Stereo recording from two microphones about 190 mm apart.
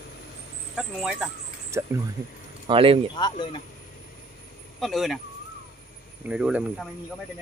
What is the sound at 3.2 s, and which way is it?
Speech, 25° left (ahead or behind).